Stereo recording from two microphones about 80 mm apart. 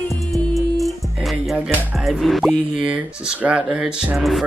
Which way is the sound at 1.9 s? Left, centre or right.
Centre.